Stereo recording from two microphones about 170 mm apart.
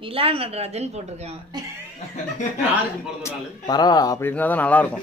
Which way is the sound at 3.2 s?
25° left (ahead or behind).